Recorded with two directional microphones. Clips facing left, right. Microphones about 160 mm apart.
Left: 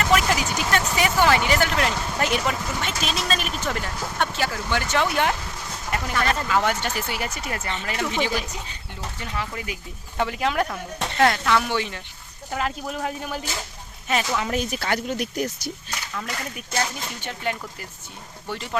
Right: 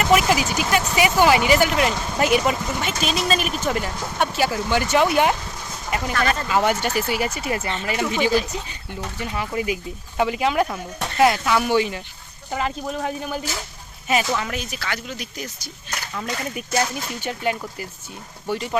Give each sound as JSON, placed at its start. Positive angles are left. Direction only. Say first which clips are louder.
{"t": 0.0, "sound": "speech", "louder": "right 3 dB", "side_deg": -10}
{"t": 3.0, "sound": "speech", "louder": "right 6 dB", "side_deg": -5}
{"t": 6.5, "sound": "speech", "louder": "right 3 dB", "side_deg": -10}
{"t": 7.6, "sound": "speech", "louder": "right 4 dB", "side_deg": -15}
{"t": 8.0, "sound": "speech", "louder": "right 3 dB", "side_deg": -5}
{"t": 9.3, "sound": "speech", "louder": "right 7 dB", "side_deg": -15}
{"t": 10.2, "sound": "speech", "louder": "right 3 dB", "side_deg": -5}
{"t": 14.5, "sound": "speech", "louder": "left 4 dB", "side_deg": 50}
{"t": 16.1, "sound": "speech", "louder": "right 4 dB", "side_deg": -10}